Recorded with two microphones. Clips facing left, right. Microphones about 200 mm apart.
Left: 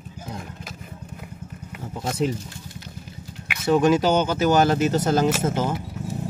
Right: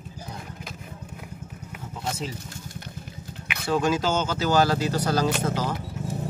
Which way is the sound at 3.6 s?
20° left (ahead or behind).